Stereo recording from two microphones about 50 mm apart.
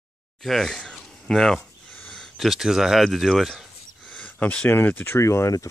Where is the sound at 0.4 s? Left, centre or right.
Centre.